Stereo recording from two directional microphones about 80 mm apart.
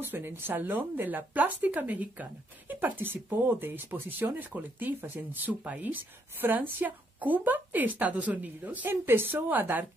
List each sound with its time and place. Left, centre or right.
0.0 s a woman's voice: right